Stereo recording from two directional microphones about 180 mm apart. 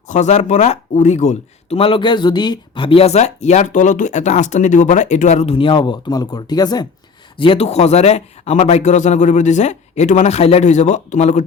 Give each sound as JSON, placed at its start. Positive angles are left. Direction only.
{"t": 0.1, "sound": "speech", "side_deg": 40}